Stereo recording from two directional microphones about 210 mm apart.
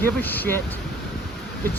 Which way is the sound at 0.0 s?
10° left (ahead or behind).